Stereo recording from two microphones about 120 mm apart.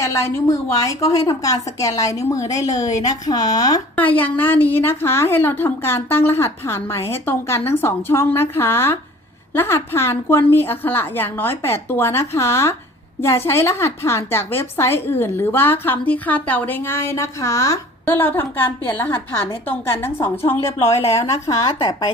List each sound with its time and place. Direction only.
0.0 s a woman's voice: 25° left (ahead or behind)
3.9 s a woman's voice: 15° left (ahead or behind)
18.0 s a woman's voice: 15° left (ahead or behind)